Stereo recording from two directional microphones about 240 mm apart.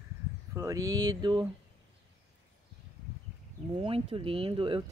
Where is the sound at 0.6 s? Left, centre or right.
Centre.